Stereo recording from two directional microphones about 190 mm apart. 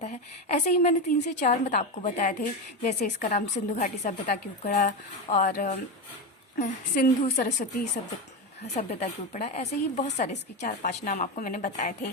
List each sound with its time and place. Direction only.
0.0 s a woman's voice: 35° left (ahead or behind)